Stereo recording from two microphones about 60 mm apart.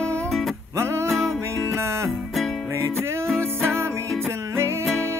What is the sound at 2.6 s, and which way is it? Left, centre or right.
Music, right.